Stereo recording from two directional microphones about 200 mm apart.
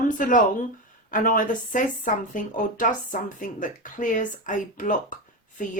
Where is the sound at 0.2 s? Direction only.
40° left (ahead or behind).